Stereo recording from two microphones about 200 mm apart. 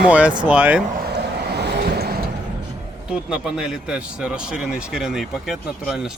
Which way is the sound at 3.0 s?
5° right (ahead or behind).